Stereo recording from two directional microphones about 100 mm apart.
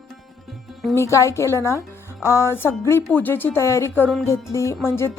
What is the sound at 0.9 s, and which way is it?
A woman's voice, 30° left (ahead or behind).